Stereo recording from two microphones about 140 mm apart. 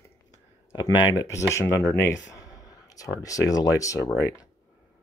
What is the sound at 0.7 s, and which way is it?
Speech, 25° left (ahead or behind).